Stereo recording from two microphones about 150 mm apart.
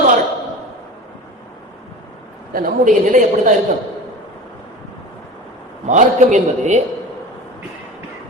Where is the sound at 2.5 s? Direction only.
70° right (ahead or behind).